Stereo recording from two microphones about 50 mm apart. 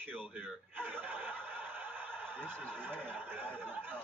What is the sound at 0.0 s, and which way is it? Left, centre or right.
Speech, right.